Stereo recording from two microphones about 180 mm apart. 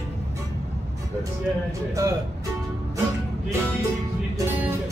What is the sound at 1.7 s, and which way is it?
Speech, 15° right (ahead or behind).